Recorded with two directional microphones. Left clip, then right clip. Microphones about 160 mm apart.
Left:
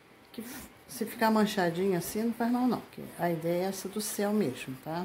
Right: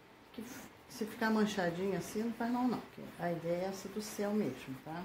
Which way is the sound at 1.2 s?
50° left (ahead or behind).